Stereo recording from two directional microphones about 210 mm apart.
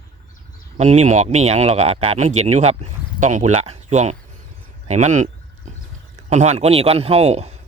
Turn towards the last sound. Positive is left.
turn(degrees=-30)  # may be behind; listen again after turning